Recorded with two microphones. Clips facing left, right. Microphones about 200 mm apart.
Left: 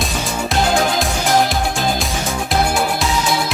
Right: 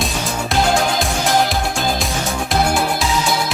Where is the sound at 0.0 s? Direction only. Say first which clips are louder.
Even; centre (ahead or behind).